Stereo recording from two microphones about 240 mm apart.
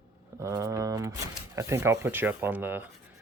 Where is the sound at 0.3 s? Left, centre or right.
Centre.